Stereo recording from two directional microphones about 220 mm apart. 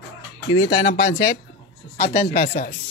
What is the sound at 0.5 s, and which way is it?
Speech, 50° left (ahead or behind).